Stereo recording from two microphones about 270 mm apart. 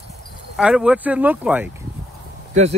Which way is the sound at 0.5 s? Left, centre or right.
Centre.